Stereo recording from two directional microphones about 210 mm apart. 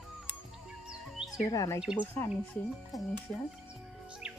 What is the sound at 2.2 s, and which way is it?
Speech, 5° left (ahead or behind).